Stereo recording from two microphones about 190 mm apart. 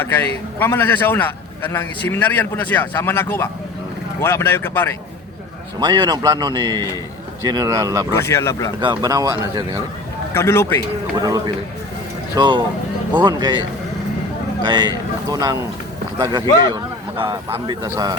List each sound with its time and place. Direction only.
0.0 s a man's voice: 10° left (ahead or behind)
5.8 s a man's voice: 20° right (ahead or behind)
8.1 s a man's voice: 15° left (ahead or behind)
8.8 s a man's voice: 20° right (ahead or behind)
10.3 s a man's voice: 15° left (ahead or behind)
11.2 s a man's voice: 20° right (ahead or behind)
14.6 s a man's voice: 25° right (ahead or behind)